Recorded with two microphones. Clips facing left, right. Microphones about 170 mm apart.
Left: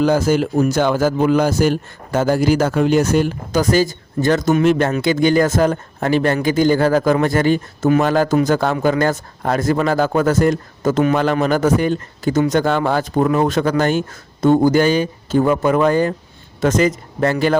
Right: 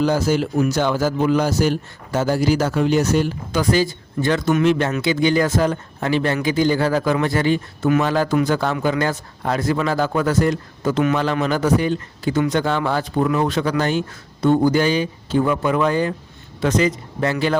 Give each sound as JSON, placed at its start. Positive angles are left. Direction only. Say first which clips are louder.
{"t": 0.0, "sound": "a man's voice", "louder": "left 3 dB", "side_deg": 50}